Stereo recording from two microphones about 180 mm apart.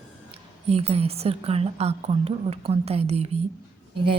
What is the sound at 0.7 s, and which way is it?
A woman's voice, 35° right (ahead or behind).